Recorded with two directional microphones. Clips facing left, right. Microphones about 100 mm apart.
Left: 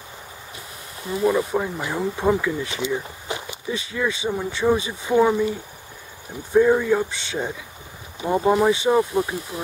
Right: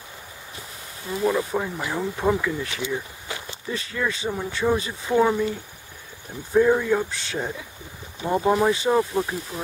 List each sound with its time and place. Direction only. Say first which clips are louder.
1.2 s speech: left 3 dB; 5° left (ahead or behind)
2.7 s a sound: left 3 dB; 20° left (ahead or behind)
3.7 s speech: left 2 dB; 5° left (ahead or behind)
6.5 s speech: left 2 dB; centre (ahead or behind)